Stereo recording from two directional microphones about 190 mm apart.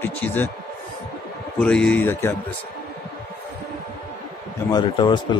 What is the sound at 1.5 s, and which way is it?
Speech, 5° left (ahead or behind).